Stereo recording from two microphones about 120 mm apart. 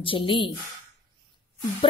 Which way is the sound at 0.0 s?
45° left (ahead or behind).